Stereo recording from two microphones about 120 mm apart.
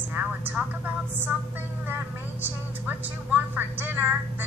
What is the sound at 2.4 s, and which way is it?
A woman's voice, 15° right (ahead or behind).